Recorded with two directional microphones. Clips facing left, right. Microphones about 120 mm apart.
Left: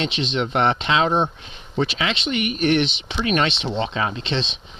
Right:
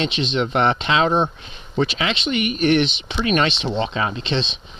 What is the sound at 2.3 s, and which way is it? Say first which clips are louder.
Speech: right 2 dB; 25° left (ahead or behind).